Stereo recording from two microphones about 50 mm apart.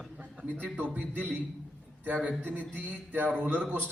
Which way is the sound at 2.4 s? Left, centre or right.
Right.